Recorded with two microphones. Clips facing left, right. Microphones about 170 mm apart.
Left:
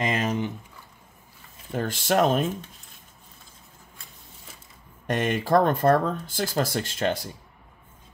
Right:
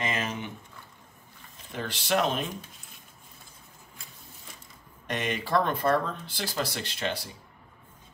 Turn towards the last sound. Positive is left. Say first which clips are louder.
# left 6 dB
turn(degrees=45)  # may be behind; listen again after turning